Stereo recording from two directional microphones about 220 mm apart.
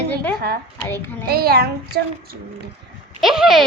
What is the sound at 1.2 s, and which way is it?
A child's voice, 45° right (ahead or behind).